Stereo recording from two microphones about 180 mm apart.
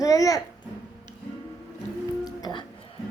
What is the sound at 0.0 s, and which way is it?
Speech, 20° left (ahead or behind).